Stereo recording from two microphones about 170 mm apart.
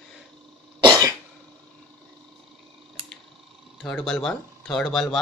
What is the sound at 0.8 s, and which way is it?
Cough, 25° right (ahead or behind).